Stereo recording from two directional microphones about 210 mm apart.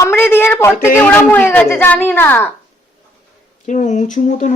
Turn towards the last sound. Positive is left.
turn(degrees=35)  # may be behind; listen again after turning